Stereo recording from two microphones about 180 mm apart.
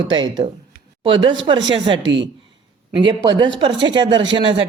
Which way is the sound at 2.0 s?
85° right.